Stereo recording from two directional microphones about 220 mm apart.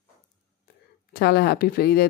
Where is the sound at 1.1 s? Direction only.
45° left (ahead or behind).